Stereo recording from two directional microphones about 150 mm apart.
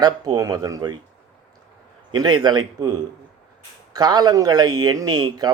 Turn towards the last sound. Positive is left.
turn(degrees=-30)  # may be behind; listen again after turning